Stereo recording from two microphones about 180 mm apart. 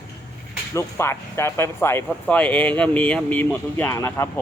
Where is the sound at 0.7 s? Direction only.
15° left (ahead or behind).